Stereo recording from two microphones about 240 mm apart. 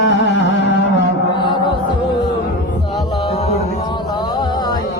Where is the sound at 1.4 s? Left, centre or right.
Centre.